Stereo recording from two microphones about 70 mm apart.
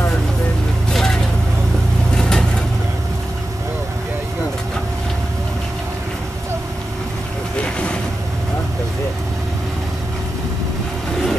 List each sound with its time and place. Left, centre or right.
2.1 s vehicle: centre
7.5 s vehicle: centre